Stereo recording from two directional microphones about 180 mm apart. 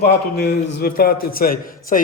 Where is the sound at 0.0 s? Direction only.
65° left (ahead or behind).